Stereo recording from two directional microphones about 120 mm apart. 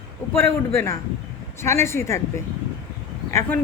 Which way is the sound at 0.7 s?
20° left (ahead or behind).